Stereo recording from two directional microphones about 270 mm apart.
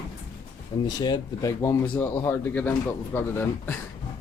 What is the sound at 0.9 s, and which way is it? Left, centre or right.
Speech, centre.